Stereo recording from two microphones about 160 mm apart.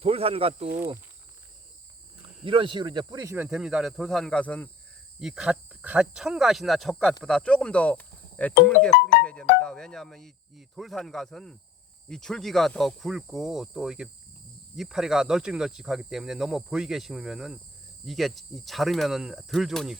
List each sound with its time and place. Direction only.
0.0 s speech: 40° right (ahead or behind)
2.4 s speech: 35° right (ahead or behind)
3.3 s speech: 5° right (ahead or behind); by 4.7 s 10° left (ahead or behind)
5.2 s speech: 5° right (ahead or behind)
9.2 s music: 5° left (ahead or behind)
9.6 s speech: 5° left (ahead or behind)